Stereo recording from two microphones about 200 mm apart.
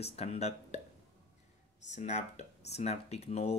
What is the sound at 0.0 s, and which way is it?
Speech, 30° left (ahead or behind).